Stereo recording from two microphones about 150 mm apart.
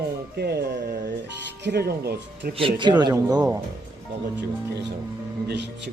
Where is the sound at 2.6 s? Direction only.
35° right (ahead or behind).